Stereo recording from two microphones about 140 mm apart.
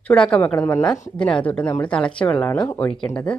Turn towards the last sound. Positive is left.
turn(degrees=10)  # may be behind; listen again after turning